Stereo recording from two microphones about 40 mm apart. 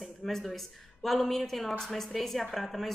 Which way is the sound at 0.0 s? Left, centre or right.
Centre.